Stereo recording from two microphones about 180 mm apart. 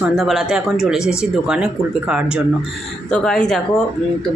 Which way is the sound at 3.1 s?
5° left (ahead or behind).